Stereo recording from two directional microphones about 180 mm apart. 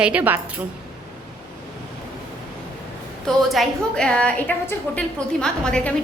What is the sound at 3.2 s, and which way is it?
A woman's voice, centre (ahead or behind).